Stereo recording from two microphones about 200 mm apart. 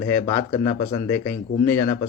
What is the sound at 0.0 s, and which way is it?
A man's voice, 10° left (ahead or behind).